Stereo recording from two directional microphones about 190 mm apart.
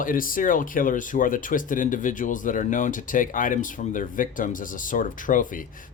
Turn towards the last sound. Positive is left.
turn(degrees=45)  # may be behind; listen again after turning